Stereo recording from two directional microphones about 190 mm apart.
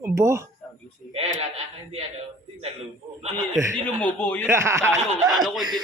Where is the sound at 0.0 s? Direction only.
15° right (ahead or behind).